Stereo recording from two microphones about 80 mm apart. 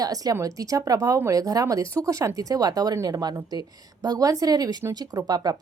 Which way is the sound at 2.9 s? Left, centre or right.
Right.